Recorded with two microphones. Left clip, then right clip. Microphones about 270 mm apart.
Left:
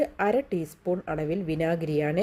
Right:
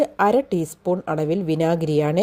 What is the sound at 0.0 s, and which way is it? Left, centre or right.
Speech, right.